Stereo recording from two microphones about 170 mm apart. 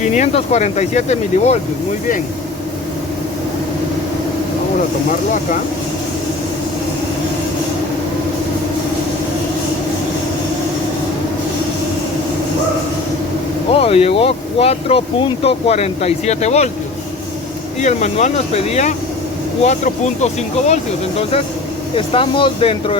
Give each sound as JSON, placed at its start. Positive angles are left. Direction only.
{"t": 0.0, "sound": "speech", "side_deg": 45}
{"t": 13.7, "sound": "speech", "side_deg": 35}
{"t": 17.8, "sound": "speech", "side_deg": 45}
{"t": 21.9, "sound": "speech", "side_deg": 30}